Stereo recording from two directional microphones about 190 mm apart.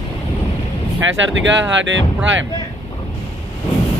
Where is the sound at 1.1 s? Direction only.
80° right.